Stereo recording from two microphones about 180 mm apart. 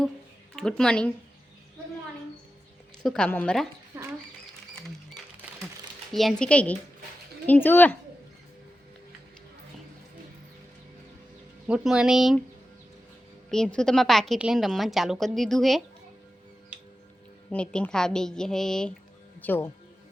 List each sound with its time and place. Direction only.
0.5 s a woman's voice: 5° left (ahead or behind)
3.0 s a woman's voice: 5° left (ahead or behind)
3.9 s rodents: 15° right (ahead or behind)
6.1 s a woman's voice: centre (ahead or behind)
11.7 s a woman's voice: 5° right (ahead or behind)
13.5 s a woman's voice: 5° left (ahead or behind)
17.5 s a woman's voice: 5° left (ahead or behind)